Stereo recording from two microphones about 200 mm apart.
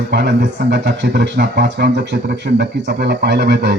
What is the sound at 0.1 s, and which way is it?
Speech, 60° right (ahead or behind).